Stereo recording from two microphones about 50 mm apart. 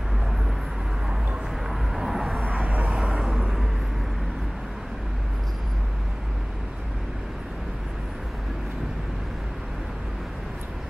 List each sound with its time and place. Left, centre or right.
1.7 s vehicle: centre
2.6 s vehicle: right
3.0 s vehicle: centre